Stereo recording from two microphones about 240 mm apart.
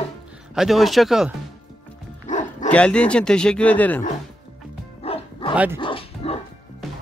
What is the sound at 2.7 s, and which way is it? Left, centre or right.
Speech, centre.